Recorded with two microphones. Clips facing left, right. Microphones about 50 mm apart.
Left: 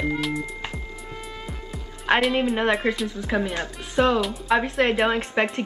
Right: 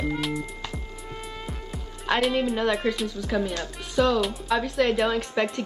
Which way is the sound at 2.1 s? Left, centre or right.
Left.